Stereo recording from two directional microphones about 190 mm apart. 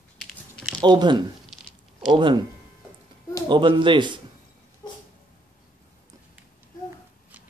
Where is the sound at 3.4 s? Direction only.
25° right (ahead or behind).